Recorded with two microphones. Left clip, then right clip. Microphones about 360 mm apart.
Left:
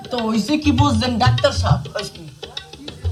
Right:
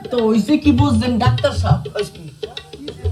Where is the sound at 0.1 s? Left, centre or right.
Centre.